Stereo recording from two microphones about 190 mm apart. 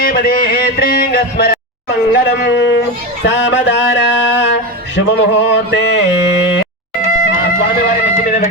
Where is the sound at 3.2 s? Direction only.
65° left (ahead or behind).